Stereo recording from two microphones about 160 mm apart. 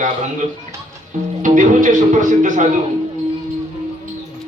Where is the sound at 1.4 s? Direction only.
55° right (ahead or behind).